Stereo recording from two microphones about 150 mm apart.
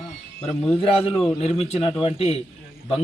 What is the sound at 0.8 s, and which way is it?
A man's voice, 40° left (ahead or behind).